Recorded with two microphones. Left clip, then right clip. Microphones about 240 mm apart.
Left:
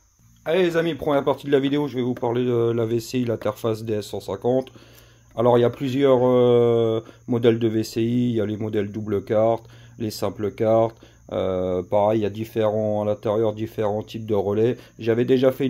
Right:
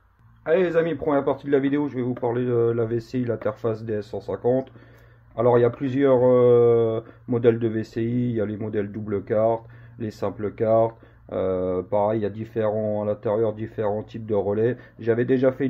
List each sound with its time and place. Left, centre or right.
0.4 s speech: left